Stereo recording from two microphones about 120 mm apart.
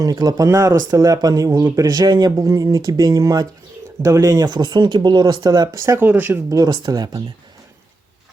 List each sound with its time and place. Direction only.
0.0 s speech: 30° right (ahead or behind)
6.7 s speech: 35° right (ahead or behind)